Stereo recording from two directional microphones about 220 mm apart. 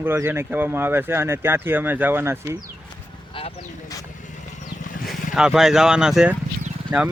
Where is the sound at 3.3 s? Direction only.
25° left (ahead or behind).